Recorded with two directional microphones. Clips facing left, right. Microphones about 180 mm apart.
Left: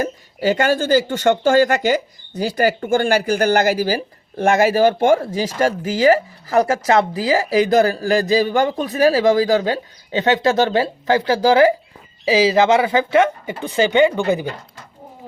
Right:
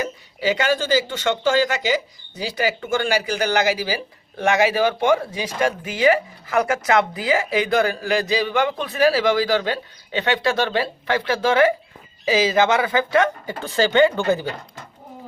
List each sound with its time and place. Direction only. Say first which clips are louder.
0.0 s speech: left 4 dB; 45° left (ahead or behind); by 14.4 s 15° left (ahead or behind)